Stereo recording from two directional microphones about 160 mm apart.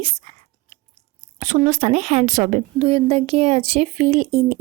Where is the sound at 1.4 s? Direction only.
45° right (ahead or behind).